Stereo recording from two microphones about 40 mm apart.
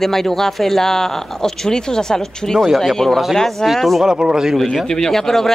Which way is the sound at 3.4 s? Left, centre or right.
Centre.